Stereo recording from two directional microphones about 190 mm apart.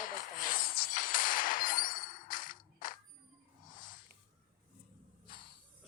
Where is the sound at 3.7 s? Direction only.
45° left (ahead or behind).